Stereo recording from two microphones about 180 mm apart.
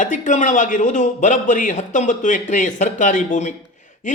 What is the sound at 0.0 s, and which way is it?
Speech, 45° left (ahead or behind).